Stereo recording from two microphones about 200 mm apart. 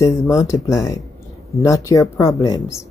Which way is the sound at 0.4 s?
15° left (ahead or behind).